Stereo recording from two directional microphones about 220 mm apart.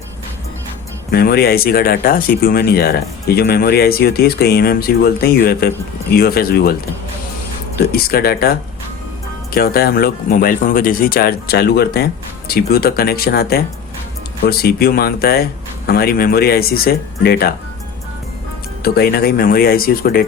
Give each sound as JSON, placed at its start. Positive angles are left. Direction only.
{"t": 1.1, "sound": "speech", "side_deg": 45}
{"t": 7.8, "sound": "speech", "side_deg": 45}
{"t": 18.8, "sound": "speech", "side_deg": 45}